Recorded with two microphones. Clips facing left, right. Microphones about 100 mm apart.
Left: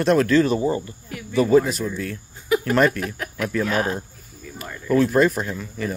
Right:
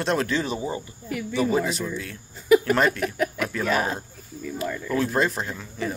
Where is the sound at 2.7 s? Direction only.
20° right (ahead or behind).